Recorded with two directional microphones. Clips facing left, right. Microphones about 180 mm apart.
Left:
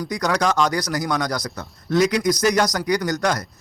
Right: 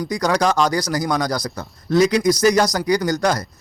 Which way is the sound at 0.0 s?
30° right (ahead or behind).